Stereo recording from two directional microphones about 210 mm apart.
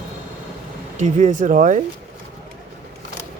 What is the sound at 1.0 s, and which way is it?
Speech, 35° right (ahead or behind).